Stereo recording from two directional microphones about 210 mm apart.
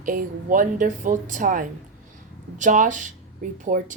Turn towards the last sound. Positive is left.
turn(degrees=-35)  # may be behind; listen again after turning